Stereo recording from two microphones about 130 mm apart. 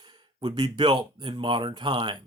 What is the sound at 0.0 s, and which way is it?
Speech, 35° right (ahead or behind).